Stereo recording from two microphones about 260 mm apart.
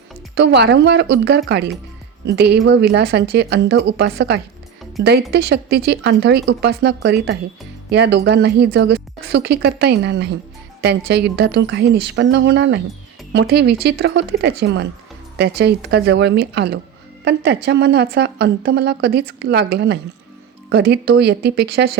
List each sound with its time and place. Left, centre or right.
0.3 s a woman's voice: right